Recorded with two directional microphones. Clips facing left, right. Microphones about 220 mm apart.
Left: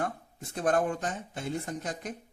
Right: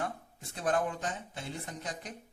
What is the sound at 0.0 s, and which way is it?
A man's voice, 45° left (ahead or behind).